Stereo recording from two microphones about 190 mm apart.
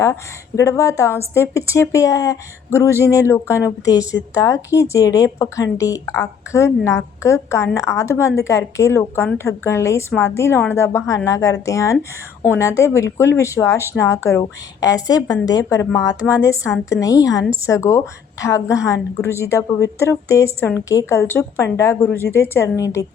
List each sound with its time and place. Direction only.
0.0 s a woman's voice: 15° left (ahead or behind)